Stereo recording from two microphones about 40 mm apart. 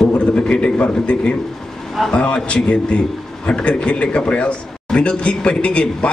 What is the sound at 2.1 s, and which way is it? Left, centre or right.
A man's voice, left.